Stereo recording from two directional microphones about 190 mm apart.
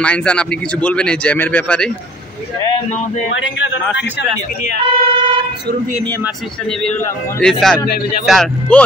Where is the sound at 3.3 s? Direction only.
75° left (ahead or behind).